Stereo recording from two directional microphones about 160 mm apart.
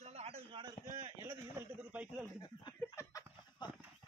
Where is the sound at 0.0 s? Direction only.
40° right (ahead or behind).